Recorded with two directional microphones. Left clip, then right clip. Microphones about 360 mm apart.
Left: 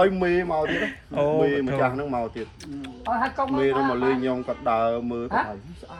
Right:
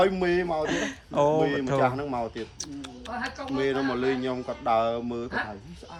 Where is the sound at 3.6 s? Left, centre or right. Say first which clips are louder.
Left 3 dB; centre.